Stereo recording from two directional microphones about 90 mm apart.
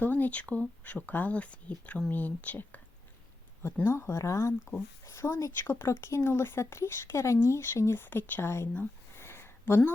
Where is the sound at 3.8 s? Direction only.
30° left (ahead or behind).